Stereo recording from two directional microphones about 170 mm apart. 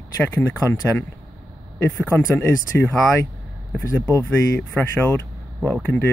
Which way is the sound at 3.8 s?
20° left (ahead or behind).